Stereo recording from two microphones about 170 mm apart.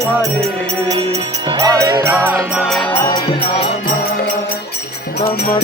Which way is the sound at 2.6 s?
5° left (ahead or behind).